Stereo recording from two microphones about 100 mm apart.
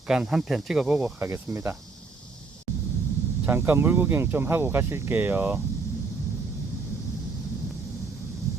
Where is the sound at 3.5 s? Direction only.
25° right (ahead or behind).